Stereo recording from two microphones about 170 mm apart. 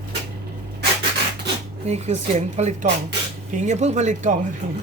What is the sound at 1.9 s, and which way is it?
Speech, 40° right (ahead or behind).